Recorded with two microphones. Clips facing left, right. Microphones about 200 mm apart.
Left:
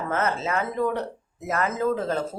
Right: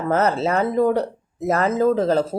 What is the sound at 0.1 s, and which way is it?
Speech, 35° right (ahead or behind).